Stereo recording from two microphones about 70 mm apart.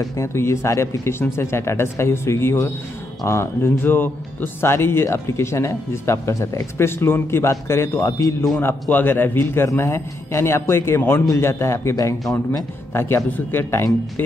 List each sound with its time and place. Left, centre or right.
0.0 s speech: left
3.8 s a man's voice: left
11.2 s speech: left
12.9 s speech: left